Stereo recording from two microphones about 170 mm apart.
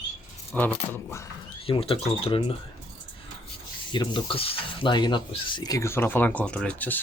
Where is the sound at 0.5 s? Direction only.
10° left (ahead or behind).